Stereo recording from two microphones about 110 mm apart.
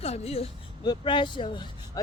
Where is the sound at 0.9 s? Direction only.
50° left (ahead or behind).